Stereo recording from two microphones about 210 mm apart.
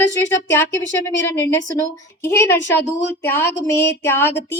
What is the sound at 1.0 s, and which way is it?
Speech, 10° left (ahead or behind).